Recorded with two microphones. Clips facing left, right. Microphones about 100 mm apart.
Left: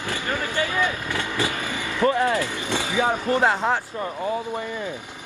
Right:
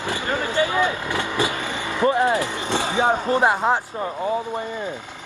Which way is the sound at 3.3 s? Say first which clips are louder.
Right 2 dB; 20° right (ahead or behind).